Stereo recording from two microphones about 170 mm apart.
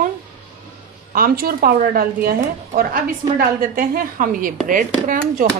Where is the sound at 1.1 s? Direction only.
60° right (ahead or behind).